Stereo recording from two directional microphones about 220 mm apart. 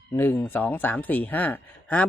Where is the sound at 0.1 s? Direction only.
10° left (ahead or behind).